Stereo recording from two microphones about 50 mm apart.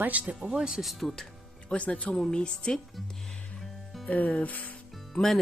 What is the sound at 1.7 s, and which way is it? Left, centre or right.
Speech, left.